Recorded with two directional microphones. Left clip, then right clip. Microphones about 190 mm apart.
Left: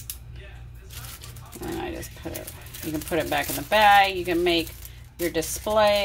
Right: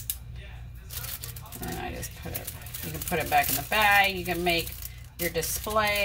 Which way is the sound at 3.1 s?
45° left (ahead or behind).